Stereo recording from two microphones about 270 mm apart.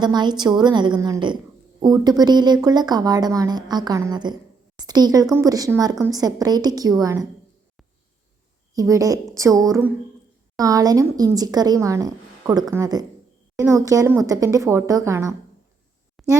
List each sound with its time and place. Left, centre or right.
0.0 s speech: centre
8.7 s speech: centre
16.2 s a sound: centre